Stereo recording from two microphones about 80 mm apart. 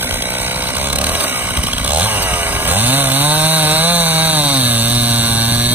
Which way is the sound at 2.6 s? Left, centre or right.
Right.